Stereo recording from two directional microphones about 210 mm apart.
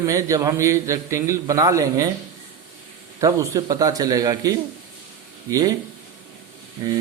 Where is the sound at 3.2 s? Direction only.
15° right (ahead or behind).